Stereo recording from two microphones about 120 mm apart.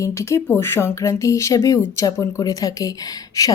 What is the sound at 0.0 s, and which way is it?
Speech, 25° left (ahead or behind).